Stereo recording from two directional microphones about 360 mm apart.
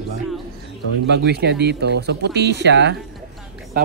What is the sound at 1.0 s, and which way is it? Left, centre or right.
A man's voice, right.